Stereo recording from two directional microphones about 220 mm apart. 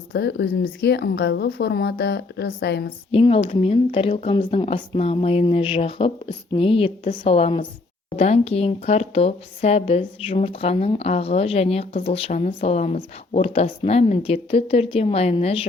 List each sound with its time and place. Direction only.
0.1 s a woman's voice: 50° left (ahead or behind)
3.1 s speech: 25° left (ahead or behind)